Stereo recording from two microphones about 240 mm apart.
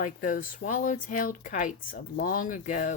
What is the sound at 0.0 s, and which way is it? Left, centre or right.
Speech, left.